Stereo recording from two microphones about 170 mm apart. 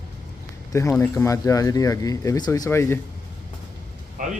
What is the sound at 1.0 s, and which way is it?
Speech, 20° left (ahead or behind).